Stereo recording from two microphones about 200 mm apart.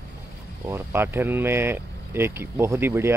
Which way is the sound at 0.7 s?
10° right (ahead or behind).